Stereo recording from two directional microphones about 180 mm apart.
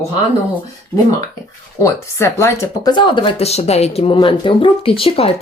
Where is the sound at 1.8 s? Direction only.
15° left (ahead or behind).